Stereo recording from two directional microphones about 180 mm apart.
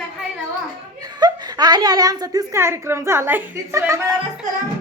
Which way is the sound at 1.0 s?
20° right (ahead or behind).